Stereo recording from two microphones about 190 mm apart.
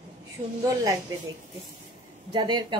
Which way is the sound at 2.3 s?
25° right (ahead or behind).